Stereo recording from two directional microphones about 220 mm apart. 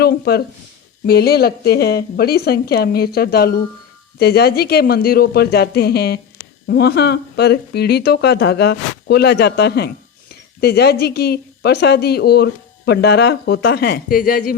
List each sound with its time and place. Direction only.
0.0 s speech: 45° left (ahead or behind)